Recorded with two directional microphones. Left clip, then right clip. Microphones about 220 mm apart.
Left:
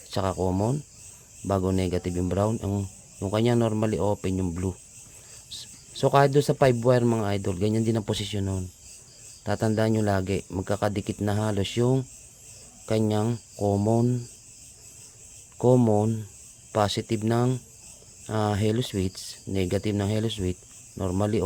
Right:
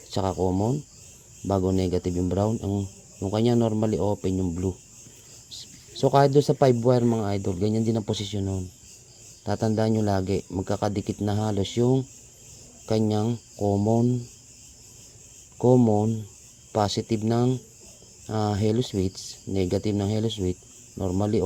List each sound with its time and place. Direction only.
0.1 s speech: 15° left (ahead or behind)
5.9 s speech: 15° left (ahead or behind)
13.1 s speech: 20° left (ahead or behind)
15.5 s speech: 20° left (ahead or behind)